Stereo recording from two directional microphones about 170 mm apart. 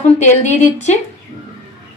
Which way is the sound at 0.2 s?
45° left (ahead or behind).